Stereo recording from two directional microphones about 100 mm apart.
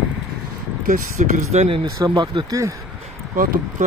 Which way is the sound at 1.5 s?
90° right.